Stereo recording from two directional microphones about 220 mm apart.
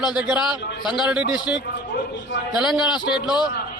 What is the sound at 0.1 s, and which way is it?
Speech, 5° right (ahead or behind).